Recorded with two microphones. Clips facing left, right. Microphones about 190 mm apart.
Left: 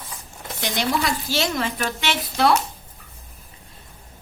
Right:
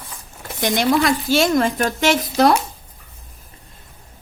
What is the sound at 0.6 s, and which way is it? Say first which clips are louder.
Speech: right 6 dB; 50° right (ahead or behind).